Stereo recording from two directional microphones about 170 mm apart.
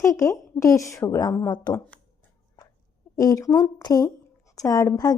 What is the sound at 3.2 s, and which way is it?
A woman's voice, 20° left (ahead or behind).